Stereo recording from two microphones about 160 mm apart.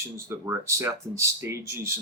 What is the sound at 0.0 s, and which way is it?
Speech, 15° right (ahead or behind).